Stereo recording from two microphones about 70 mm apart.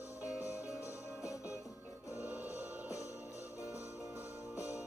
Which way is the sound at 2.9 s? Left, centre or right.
Left.